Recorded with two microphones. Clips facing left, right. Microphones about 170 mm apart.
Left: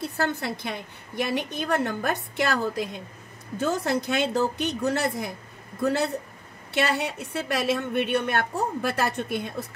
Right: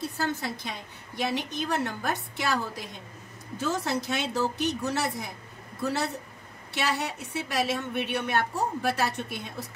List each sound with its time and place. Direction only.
0.2 s a woman's voice: 60° left (ahead or behind)
6.7 s a woman's voice: 60° left (ahead or behind)